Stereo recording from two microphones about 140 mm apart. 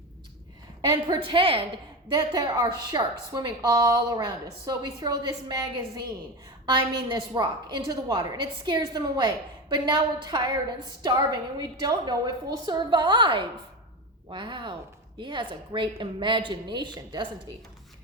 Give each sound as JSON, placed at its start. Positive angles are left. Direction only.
{"t": 0.8, "sound": "a woman's voice", "side_deg": -30}